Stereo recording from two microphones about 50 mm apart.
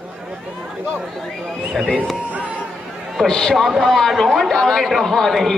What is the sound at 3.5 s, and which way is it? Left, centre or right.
Speech, centre.